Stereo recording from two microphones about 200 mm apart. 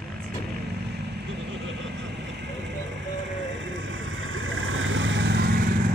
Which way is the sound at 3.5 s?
70° right (ahead or behind).